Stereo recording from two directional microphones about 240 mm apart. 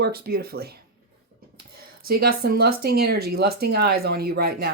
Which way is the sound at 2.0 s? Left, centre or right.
Right.